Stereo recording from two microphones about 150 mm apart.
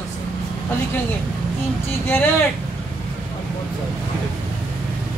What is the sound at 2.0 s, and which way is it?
Speech, 15° left (ahead or behind).